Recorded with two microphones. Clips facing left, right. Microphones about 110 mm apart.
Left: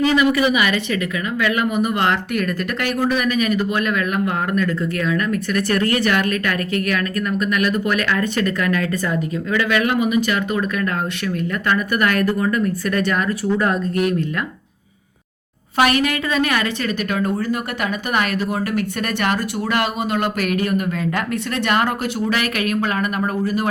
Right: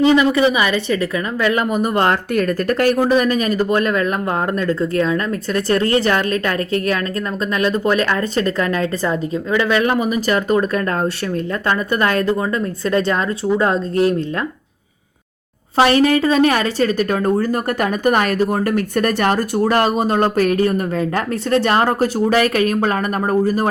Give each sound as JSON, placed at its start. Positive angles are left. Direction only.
{"t": 0.0, "sound": "speech", "side_deg": -30}
{"t": 15.8, "sound": "speech", "side_deg": -30}